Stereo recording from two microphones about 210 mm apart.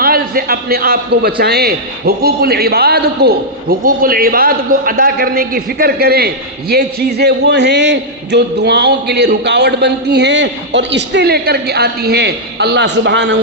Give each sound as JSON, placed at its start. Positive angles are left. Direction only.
{"t": 0.0, "sound": "a man's voice", "side_deg": -45}